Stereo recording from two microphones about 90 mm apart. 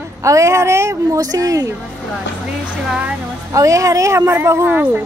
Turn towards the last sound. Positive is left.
turn(degrees=-30)  # may be behind; listen again after turning